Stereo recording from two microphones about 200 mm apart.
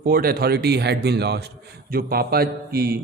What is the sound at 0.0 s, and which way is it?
A man's voice, 45° right (ahead or behind).